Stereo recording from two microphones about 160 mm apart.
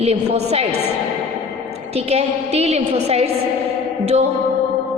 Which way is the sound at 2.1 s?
40° right (ahead or behind).